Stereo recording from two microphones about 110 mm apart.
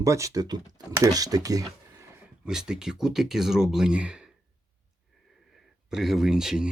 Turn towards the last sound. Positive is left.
turn(degrees=-5)  # may be behind; listen again after turning